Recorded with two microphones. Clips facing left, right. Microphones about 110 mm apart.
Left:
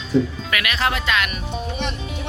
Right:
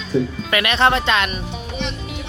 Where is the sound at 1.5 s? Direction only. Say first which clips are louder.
Left 1 dB; 45° left (ahead or behind).